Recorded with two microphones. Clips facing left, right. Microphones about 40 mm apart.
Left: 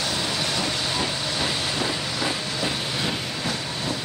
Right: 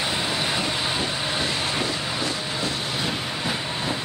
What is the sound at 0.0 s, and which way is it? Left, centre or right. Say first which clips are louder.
Vehicle: right 1 dB; right.